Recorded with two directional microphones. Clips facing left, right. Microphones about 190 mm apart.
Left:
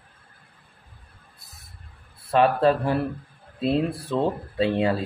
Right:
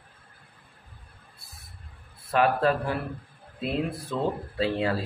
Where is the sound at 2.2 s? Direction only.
30° left (ahead or behind).